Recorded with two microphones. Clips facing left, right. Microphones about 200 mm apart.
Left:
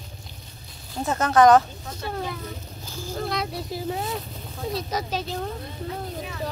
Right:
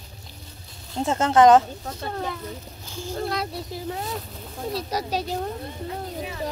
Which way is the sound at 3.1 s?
5° right (ahead or behind).